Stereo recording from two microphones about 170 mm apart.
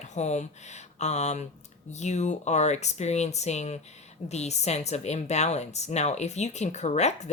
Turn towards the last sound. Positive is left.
turn(degrees=40)  # may be behind; listen again after turning